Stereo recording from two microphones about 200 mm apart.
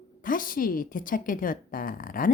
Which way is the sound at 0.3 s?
45° left (ahead or behind).